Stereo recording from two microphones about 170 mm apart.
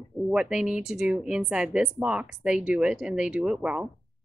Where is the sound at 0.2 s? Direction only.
Centre (ahead or behind).